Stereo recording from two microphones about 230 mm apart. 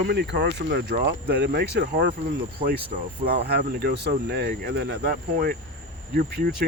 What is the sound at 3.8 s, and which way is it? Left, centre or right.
Speech, right.